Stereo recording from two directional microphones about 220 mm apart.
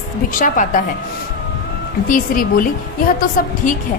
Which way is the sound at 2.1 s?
40° left (ahead or behind).